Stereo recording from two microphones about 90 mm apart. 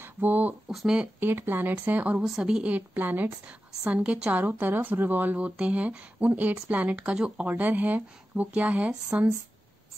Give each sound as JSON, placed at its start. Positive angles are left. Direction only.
{"t": 0.0, "sound": "a sound", "side_deg": -20}
{"t": 0.7, "sound": "speech", "side_deg": -5}
{"t": 1.2, "sound": "speech", "side_deg": -25}
{"t": 2.2, "sound": "a woman's voice", "side_deg": -5}